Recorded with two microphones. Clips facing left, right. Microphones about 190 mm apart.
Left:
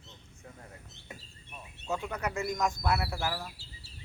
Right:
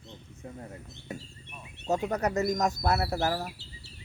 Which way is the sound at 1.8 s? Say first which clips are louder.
Right 6 dB; 40° right (ahead or behind).